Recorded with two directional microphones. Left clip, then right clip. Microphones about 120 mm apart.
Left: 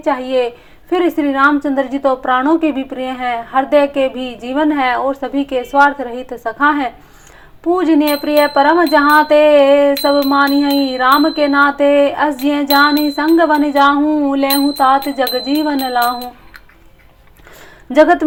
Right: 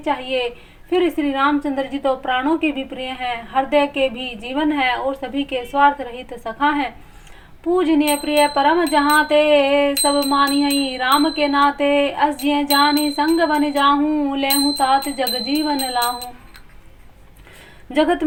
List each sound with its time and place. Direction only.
0.0 s a woman's voice: 35° left (ahead or behind)
17.9 s a woman's voice: 30° left (ahead or behind)